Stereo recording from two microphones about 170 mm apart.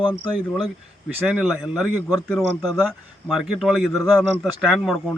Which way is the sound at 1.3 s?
5° right (ahead or behind).